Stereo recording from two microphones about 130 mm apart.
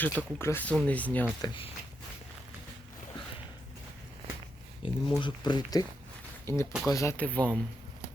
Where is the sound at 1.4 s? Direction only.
40° left (ahead or behind).